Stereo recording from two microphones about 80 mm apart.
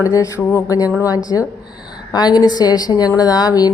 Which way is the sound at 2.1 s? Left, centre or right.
Left.